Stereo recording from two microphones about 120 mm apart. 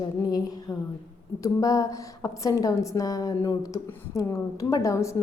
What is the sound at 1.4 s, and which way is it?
A woman's voice, 30° left (ahead or behind).